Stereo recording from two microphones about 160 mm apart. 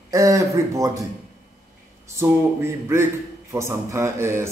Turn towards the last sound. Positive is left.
turn(degrees=-15)  # may be behind; listen again after turning